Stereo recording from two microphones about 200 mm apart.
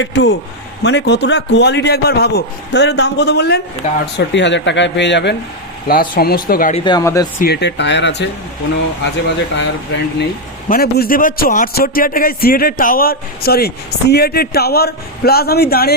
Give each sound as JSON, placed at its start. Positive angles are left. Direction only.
{"t": 0.0, "sound": "a man's voice", "side_deg": 60}
{"t": 5.9, "sound": "a man's voice", "side_deg": 45}
{"t": 6.7, "sound": "speech", "side_deg": 20}
{"t": 7.3, "sound": "a man's voice", "side_deg": 50}
{"t": 9.6, "sound": "a man's voice", "side_deg": 60}
{"t": 10.7, "sound": "a man's voice", "side_deg": 50}